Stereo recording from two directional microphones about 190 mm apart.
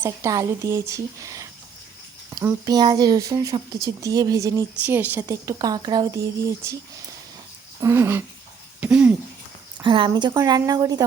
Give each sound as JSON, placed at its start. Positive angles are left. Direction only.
{"t": 0.0, "sound": "speech", "side_deg": -15}
{"t": 2.6, "sound": "speech", "side_deg": -20}
{"t": 7.8, "sound": "speech", "side_deg": -15}
{"t": 9.8, "sound": "speech", "side_deg": -25}